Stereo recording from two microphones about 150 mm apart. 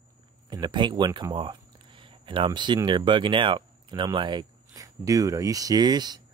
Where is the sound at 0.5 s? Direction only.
30° right (ahead or behind).